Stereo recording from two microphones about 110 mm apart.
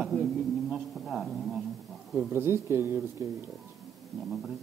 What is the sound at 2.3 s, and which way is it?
Speech, 20° right (ahead or behind).